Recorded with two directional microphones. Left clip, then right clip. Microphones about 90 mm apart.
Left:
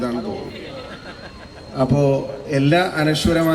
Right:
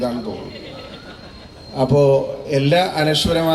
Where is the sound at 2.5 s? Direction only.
15° right (ahead or behind).